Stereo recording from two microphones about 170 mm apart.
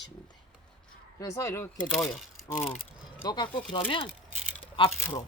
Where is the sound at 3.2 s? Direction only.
25° left (ahead or behind).